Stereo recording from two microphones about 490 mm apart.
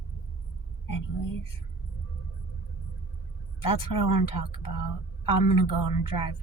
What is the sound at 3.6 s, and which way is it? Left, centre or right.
Speech, left.